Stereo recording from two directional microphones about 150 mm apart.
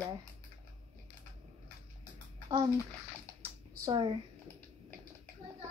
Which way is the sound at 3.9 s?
35° right (ahead or behind).